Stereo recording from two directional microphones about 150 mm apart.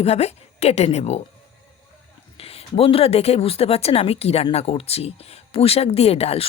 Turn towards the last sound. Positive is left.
turn(degrees=40)  # may be behind; listen again after turning